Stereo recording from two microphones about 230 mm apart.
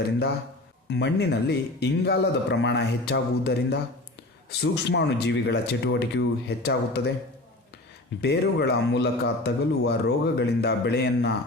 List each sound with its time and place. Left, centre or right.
0.9 s a man's voice: left
8.2 s a man's voice: left